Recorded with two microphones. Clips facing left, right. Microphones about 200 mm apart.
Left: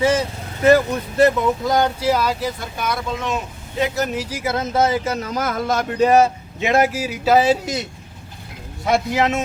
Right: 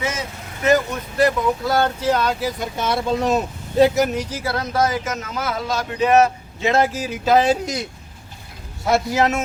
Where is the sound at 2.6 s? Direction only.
25° right (ahead or behind).